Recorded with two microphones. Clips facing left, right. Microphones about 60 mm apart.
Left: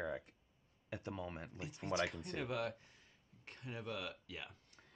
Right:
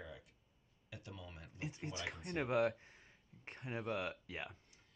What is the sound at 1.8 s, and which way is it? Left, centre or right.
Speech, left.